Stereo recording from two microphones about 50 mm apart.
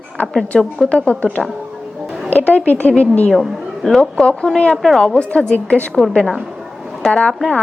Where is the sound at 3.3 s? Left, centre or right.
Centre.